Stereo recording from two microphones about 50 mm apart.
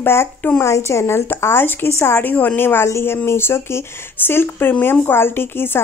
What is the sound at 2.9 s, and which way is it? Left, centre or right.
A woman's voice, left.